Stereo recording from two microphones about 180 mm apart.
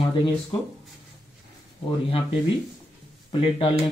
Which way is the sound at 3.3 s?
30° left (ahead or behind).